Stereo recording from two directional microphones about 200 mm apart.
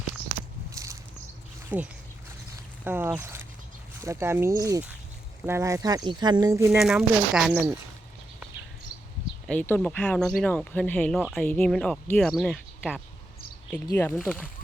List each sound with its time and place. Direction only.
0.7 s a sound: 15° right (ahead or behind)
1.7 s speech: 5° right (ahead or behind)
6.7 s speech: centre (ahead or behind)
7.5 s speech: 10° right (ahead or behind)
9.5 s speech: 10° left (ahead or behind)
13.8 s speech: 15° left (ahead or behind)
14.2 s speech: 5° right (ahead or behind)